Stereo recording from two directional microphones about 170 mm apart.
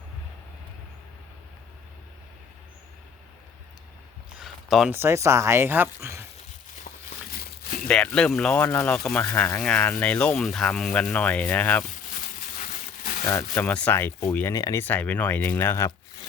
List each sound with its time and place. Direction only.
4.4 s a sound: centre (ahead or behind)
4.9 s speech: 15° right (ahead or behind)
6.9 s walk: 50° left (ahead or behind)
7.9 s speech: 5° left (ahead or behind)
12.0 s a sound: 50° left (ahead or behind)
13.2 s speech: 15° left (ahead or behind)